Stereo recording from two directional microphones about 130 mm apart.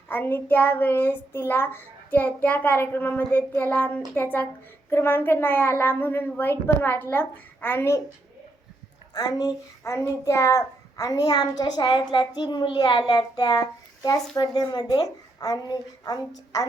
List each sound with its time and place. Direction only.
0.1 s child singing: 15° left (ahead or behind)
9.1 s a child's voice: 30° left (ahead or behind)